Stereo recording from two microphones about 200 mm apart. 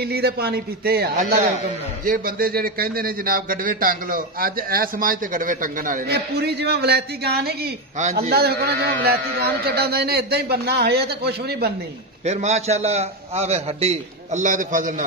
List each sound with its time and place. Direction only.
0.0 s a man's voice: 55° right (ahead or behind)
2.0 s a man's voice: 45° right (ahead or behind)
8.0 s a man's voice: 35° right (ahead or behind)
8.3 s a man's voice: 50° right (ahead or behind)
12.3 s a man's voice: 35° right (ahead or behind)